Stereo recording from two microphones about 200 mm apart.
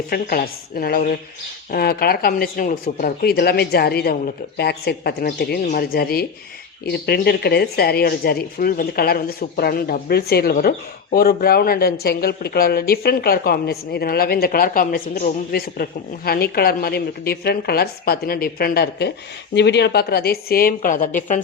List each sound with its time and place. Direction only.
0.1 s speech: 50° left (ahead or behind)